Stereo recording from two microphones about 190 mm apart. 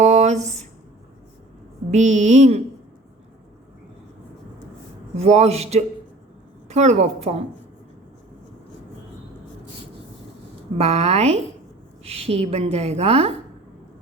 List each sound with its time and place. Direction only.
0.0 s a sound: 35° right (ahead or behind)
1.9 s a woman's voice: 40° right (ahead or behind)
5.1 s a woman's voice: 35° right (ahead or behind)
10.8 s a woman's voice: 35° right (ahead or behind)